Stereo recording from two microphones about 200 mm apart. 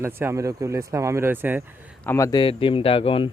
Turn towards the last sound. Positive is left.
turn(degrees=25)  # may be behind; listen again after turning